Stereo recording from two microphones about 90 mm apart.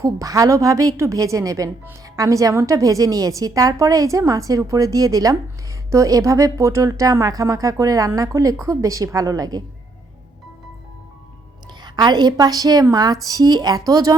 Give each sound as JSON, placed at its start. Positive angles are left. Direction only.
{"t": 0.0, "sound": "a woman's voice", "side_deg": -40}
{"t": 11.8, "sound": "a woman's voice", "side_deg": -55}